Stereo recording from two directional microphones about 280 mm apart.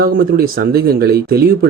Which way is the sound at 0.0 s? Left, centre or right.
Right.